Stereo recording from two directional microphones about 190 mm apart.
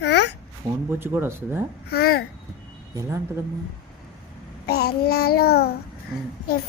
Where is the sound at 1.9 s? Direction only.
55° left (ahead or behind).